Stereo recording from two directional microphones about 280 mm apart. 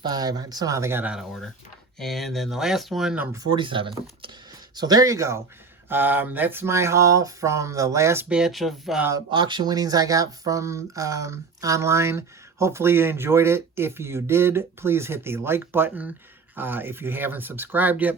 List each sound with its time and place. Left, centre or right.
0.0 s speech: centre
3.4 s speech: centre